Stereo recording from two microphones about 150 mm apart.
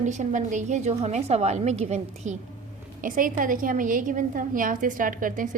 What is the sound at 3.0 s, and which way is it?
A woman's voice, 65° right (ahead or behind).